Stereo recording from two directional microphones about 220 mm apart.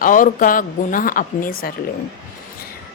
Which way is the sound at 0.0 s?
40° left (ahead or behind).